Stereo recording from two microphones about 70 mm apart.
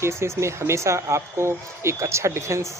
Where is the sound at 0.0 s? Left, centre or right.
Right.